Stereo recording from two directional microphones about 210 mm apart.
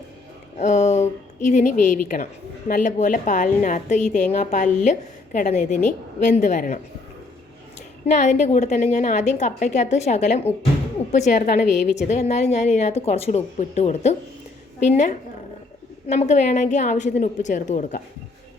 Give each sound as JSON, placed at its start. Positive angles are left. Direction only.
{"t": 0.6, "sound": "a woman's voice", "side_deg": 35}
{"t": 8.1, "sound": "a woman's voice", "side_deg": 35}